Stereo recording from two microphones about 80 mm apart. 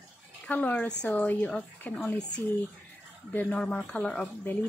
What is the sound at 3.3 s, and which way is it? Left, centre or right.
Speech, left.